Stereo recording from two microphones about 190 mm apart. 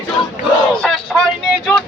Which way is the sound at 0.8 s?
5° left (ahead or behind).